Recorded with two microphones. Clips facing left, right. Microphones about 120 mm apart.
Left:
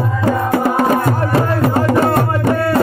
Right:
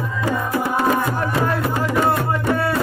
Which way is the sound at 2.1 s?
55° left (ahead or behind).